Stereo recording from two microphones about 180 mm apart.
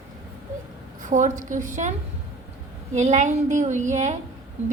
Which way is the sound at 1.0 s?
45° right (ahead or behind).